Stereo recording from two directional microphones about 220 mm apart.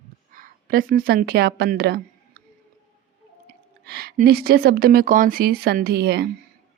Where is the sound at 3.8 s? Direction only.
45° right (ahead or behind).